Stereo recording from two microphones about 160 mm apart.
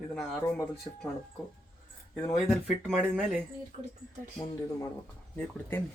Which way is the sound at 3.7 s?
50° right (ahead or behind).